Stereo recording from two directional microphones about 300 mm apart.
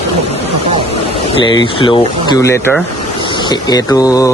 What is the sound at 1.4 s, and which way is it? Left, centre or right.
Speech, centre.